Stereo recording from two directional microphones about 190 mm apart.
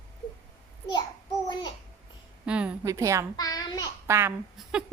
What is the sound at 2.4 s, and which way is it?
Speech, 5° right (ahead or behind).